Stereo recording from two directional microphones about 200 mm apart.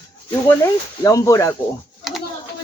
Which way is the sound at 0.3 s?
15° left (ahead or behind).